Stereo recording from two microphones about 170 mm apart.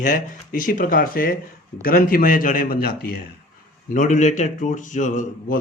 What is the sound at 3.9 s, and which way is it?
Speech, 50° left (ahead or behind).